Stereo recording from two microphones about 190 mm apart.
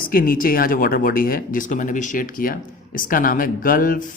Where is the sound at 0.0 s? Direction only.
50° left (ahead or behind).